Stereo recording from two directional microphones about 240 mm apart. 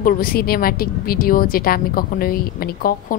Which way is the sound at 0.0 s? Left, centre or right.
Left.